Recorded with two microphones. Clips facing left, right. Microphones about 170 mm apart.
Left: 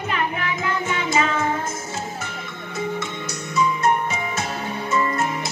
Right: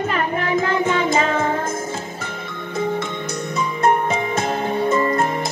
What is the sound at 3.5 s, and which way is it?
Music, 55° right (ahead or behind).